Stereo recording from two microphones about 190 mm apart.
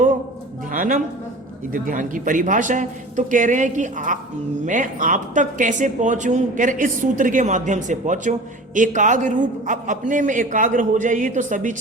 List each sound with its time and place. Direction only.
0.7 s music: 45° right (ahead or behind)
1.7 s a man's voice: 45° right (ahead or behind)